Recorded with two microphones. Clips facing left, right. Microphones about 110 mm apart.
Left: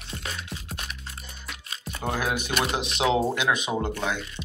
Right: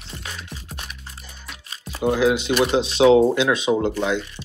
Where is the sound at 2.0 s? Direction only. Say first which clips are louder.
Right 10 dB; 15° right (ahead or behind).